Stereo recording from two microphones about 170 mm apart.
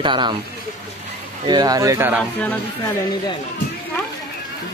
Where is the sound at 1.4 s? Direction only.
25° right (ahead or behind).